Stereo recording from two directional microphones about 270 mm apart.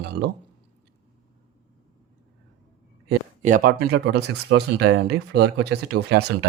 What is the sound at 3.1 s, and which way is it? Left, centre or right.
Speech, right.